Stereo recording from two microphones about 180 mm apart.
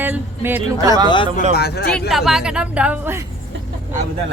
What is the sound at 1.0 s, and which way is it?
Speech, 25° left (ahead or behind).